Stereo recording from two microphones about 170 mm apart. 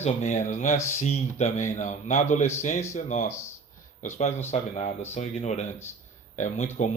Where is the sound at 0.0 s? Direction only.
45° left (ahead or behind).